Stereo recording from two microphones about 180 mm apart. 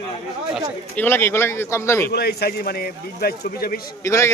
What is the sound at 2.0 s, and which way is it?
Speech, 60° left (ahead or behind).